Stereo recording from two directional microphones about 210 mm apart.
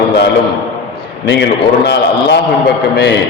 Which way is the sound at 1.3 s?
55° left (ahead or behind).